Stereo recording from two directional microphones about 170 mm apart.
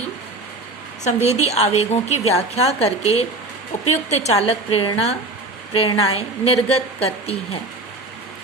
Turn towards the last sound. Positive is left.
turn(degrees=35)  # may be behind; listen again after turning